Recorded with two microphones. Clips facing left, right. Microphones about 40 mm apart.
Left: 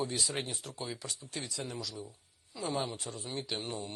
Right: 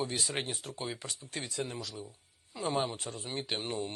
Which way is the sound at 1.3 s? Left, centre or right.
Right.